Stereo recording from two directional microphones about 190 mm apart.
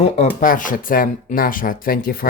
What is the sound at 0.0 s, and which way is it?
Speech, 40° left (ahead or behind).